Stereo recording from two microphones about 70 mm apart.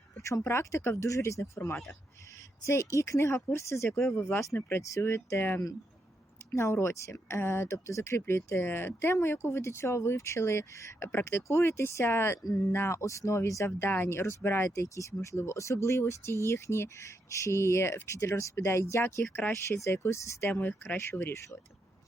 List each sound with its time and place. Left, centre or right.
0.2 s speech: left
8.6 s speech: left
13.7 s speech: left
20.5 s speech: left